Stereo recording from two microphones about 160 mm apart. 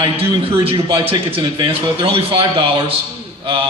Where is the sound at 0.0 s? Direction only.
35° right (ahead or behind).